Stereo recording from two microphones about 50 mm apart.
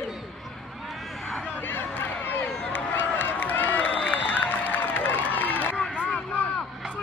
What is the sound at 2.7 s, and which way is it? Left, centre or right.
Run, left.